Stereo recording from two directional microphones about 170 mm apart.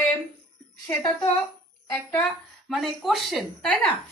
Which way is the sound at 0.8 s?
25° left (ahead or behind).